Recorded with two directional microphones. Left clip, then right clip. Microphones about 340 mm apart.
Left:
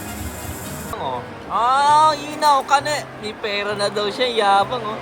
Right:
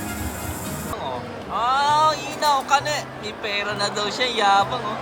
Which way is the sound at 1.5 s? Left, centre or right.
Centre.